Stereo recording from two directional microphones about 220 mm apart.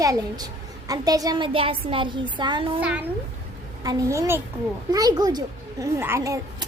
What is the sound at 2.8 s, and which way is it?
A child's voice, 5° right (ahead or behind).